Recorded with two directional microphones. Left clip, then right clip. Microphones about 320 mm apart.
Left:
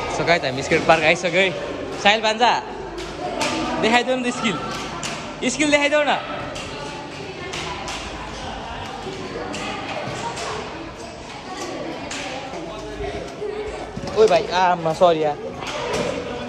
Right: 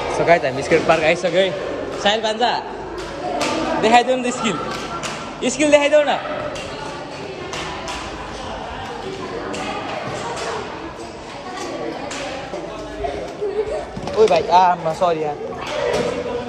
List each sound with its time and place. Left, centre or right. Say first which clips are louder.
0.1 s speech: right 4 dB; centre
3.8 s speech: right 4 dB; centre
14.2 s speech: right 3 dB; centre
14.6 s speech: right 1 dB; left